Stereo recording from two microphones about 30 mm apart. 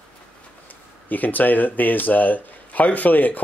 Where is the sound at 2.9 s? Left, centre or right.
Left.